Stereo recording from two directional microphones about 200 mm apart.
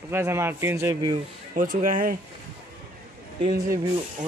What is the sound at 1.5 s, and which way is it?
Speech, 40° right (ahead or behind).